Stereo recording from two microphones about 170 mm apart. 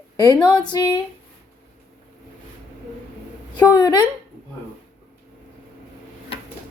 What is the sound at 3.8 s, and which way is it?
Speech, 25° left (ahead or behind).